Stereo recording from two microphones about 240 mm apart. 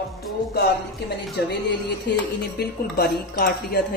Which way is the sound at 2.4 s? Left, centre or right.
Left.